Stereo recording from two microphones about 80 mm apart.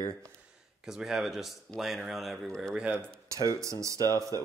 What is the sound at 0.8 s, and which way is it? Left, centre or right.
Speech, centre.